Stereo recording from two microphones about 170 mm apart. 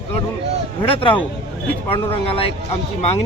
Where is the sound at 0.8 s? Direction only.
30° left (ahead or behind).